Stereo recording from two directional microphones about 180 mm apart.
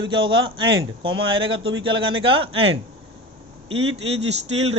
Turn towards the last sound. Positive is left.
turn(degrees=-35)  # may be behind; listen again after turning